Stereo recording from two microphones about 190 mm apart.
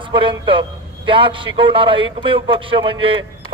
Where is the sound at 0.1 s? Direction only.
25° right (ahead or behind).